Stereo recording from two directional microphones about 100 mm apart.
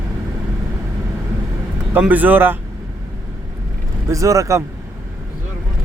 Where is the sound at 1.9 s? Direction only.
15° right (ahead or behind).